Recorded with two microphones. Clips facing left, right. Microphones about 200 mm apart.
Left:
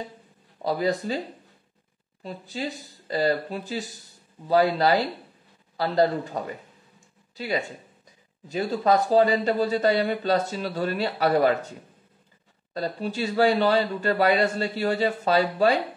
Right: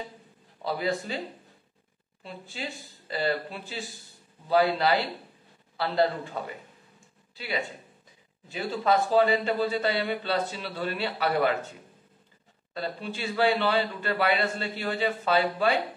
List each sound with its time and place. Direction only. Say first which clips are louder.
0.6 s speech: left 4 dB; 40° left (ahead or behind)
2.2 s a man's voice: left 6 dB; 40° left (ahead or behind)
12.7 s speech: left 5 dB; 40° left (ahead or behind)